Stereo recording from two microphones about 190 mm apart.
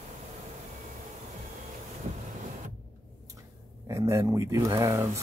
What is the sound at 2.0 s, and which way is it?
Vehicle, 35° right (ahead or behind).